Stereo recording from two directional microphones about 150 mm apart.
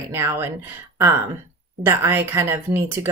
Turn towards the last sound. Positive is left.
turn(degrees=-15)  # may be behind; listen again after turning